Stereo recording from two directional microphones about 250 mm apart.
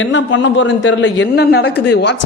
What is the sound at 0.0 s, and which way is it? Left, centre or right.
A man's voice, left.